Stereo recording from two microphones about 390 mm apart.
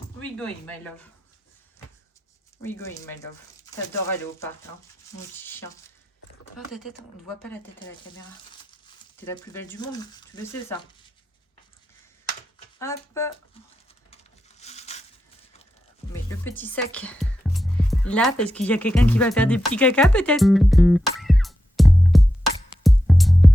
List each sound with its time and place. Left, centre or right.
0.2 s speech: centre
2.6 s speech: centre
5.4 s a sound: centre
6.7 s speech: centre
9.2 s speech: centre
12.8 s speech: centre
14.6 s a sound: centre
16.1 s music: centre
18.5 s speech: centre
22.8 s music: centre